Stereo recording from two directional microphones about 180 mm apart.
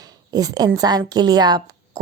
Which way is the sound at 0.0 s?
20° right (ahead or behind).